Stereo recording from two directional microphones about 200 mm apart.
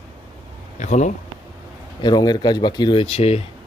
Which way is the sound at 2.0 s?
20° left (ahead or behind).